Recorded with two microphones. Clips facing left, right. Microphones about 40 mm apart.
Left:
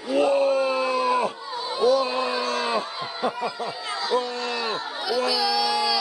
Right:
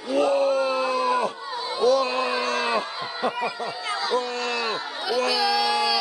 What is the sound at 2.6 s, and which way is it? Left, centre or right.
Snicker, right.